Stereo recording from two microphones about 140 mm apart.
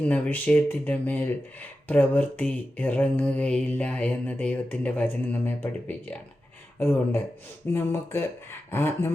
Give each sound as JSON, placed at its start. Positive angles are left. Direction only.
{"t": 0.0, "sound": "mantra", "side_deg": 10}